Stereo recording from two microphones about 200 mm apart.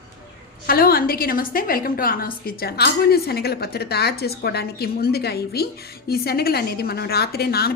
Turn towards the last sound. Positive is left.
turn(degrees=50)  # may be behind; listen again after turning